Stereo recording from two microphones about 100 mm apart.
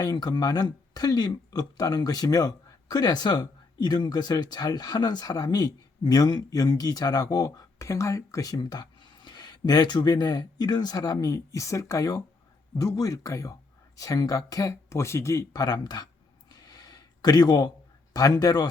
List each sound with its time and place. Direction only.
0.0 s speech: 40° left (ahead or behind)
15.5 s speech: 45° left (ahead or behind)
16.5 s a sound: 40° left (ahead or behind)
18.1 s speech: 40° left (ahead or behind)